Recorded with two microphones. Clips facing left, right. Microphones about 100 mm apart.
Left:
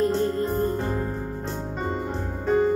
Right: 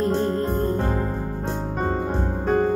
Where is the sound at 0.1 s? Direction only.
65° right (ahead or behind).